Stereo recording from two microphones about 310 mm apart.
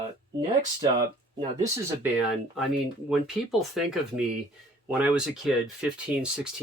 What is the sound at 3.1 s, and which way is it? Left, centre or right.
Speech, centre.